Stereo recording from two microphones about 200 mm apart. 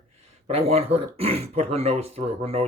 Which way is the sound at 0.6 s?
30° right (ahead or behind).